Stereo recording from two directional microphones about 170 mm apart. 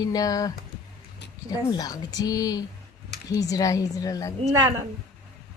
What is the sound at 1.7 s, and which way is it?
Speech, 20° left (ahead or behind).